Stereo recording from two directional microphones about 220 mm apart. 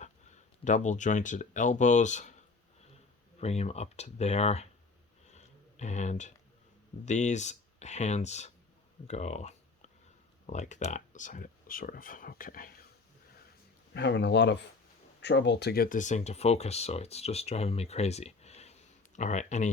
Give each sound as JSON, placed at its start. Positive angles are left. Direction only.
{"t": 0.0, "sound": "speech", "side_deg": 35}
{"t": 3.4, "sound": "speech", "side_deg": 30}
{"t": 5.3, "sound": "a sound", "side_deg": 30}
{"t": 7.0, "sound": "speech", "side_deg": 30}
{"t": 13.9, "sound": "speech", "side_deg": 50}